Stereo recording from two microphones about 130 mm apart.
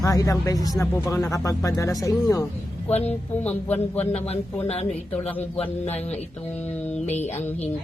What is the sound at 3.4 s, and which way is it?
Speech, 10° left (ahead or behind).